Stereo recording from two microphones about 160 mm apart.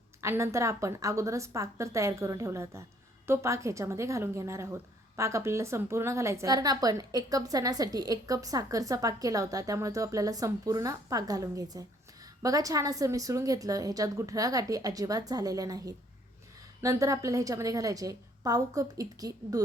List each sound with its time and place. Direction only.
0.2 s a woman's voice: 15° right (ahead or behind)